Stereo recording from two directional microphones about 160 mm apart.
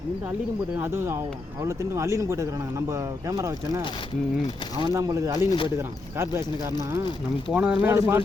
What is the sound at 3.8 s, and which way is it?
Speech, 30° left (ahead or behind).